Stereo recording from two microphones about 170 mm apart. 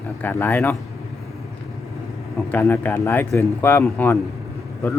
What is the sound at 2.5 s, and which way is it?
A man's voice, 15° left (ahead or behind).